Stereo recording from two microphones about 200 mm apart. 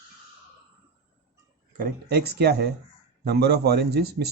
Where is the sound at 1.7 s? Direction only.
50° right (ahead or behind).